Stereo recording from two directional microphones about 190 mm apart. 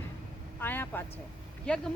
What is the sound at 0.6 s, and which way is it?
A woman's voice, 10° left (ahead or behind).